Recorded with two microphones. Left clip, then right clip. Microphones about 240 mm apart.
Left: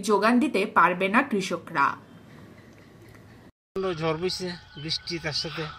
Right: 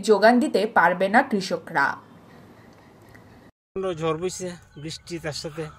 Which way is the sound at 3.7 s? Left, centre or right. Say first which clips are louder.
Right 2 dB; right.